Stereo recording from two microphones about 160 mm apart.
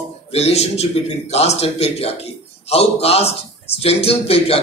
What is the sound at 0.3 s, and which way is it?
A man's voice, 40° left (ahead or behind).